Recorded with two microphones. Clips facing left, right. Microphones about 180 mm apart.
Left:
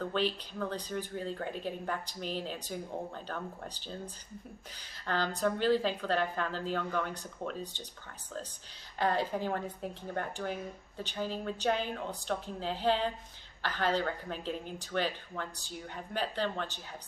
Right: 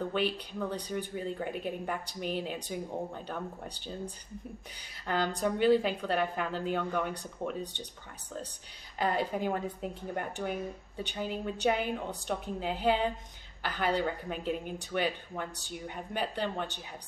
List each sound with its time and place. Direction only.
0.1 s a woman's voice: 10° right (ahead or behind)
5.0 s a woman's voice: 15° right (ahead or behind)
8.9 s a woman's voice: 10° right (ahead or behind)